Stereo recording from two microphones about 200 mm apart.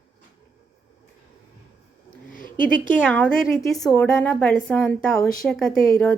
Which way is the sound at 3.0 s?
5° left (ahead or behind).